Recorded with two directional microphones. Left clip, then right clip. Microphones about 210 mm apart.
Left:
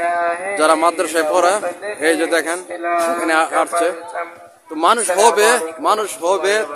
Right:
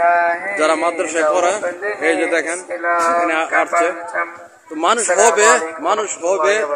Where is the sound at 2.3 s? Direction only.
15° left (ahead or behind).